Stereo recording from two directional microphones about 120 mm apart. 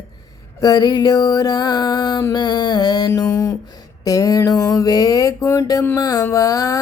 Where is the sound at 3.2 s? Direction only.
30° left (ahead or behind).